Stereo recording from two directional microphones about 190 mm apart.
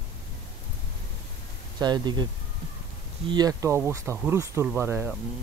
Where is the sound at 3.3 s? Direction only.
20° right (ahead or behind).